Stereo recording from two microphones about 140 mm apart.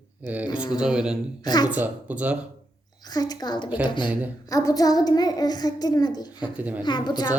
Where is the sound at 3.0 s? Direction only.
30° left (ahead or behind).